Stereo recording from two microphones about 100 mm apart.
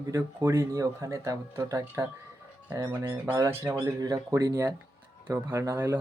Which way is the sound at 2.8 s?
35° right (ahead or behind).